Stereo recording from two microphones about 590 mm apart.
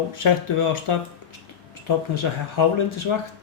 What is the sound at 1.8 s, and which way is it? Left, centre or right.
Speech, left.